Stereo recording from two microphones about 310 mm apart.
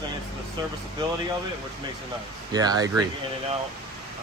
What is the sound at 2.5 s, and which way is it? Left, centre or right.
Speech, centre.